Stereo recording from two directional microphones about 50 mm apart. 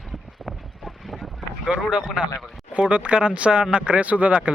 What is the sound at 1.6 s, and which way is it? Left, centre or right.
Speech, right.